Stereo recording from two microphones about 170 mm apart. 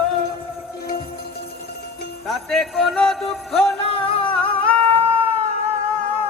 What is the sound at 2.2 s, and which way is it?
Music, centre (ahead or behind).